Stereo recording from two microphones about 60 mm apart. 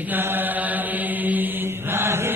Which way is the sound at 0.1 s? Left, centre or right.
Right.